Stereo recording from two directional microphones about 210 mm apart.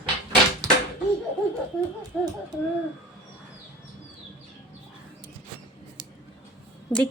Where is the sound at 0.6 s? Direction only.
15° right (ahead or behind).